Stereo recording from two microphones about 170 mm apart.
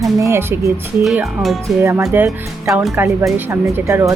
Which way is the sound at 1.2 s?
5° right (ahead or behind).